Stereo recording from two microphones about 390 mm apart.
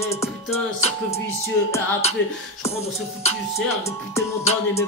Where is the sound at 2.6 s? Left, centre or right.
Centre.